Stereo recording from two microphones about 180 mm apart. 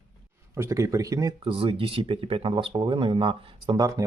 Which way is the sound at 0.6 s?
15° right (ahead or behind).